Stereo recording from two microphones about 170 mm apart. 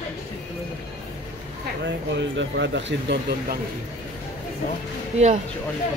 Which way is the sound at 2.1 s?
90° right.